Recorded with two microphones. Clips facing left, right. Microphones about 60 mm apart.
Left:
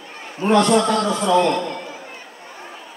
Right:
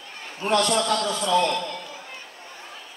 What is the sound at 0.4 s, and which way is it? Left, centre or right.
A man's voice, left.